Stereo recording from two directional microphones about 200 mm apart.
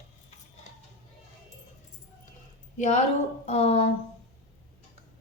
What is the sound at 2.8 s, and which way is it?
A woman's voice, 35° left (ahead or behind).